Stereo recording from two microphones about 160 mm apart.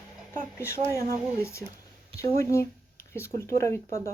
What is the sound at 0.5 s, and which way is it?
Speech, 15° left (ahead or behind).